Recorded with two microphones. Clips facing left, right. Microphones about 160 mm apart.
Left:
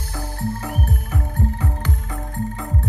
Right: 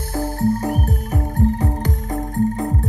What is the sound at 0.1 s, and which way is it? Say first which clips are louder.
Music: right 8 dB; 45° right (ahead or behind).